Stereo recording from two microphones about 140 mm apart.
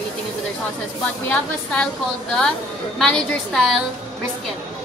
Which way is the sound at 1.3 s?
10° left (ahead or behind).